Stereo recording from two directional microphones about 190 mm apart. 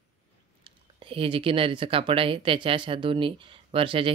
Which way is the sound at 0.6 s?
30° right (ahead or behind).